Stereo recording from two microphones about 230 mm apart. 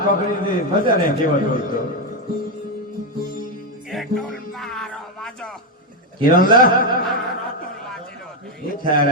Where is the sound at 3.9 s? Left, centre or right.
Centre.